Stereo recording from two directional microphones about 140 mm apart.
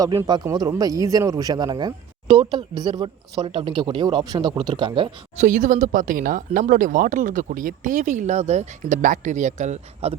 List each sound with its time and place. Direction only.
0.7 s speech: 25° right (ahead or behind)
5.4 s speech: 65° right (ahead or behind); by 10.2 s 50° right (ahead or behind)